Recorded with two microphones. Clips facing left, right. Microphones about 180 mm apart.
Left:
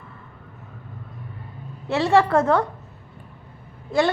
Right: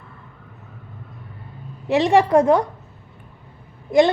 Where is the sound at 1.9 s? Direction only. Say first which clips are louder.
Right 3 dB; 15° right (ahead or behind).